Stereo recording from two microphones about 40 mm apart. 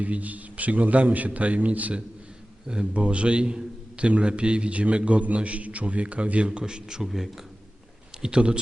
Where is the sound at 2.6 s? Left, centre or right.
Right.